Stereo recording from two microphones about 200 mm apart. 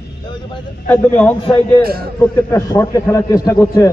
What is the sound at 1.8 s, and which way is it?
Speech, 50° right (ahead or behind).